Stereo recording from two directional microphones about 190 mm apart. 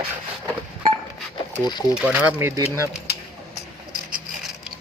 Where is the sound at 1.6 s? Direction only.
20° left (ahead or behind).